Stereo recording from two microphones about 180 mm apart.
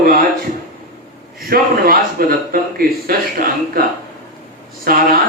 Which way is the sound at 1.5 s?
55° right (ahead or behind).